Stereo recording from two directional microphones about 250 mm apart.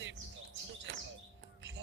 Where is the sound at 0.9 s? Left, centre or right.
Right.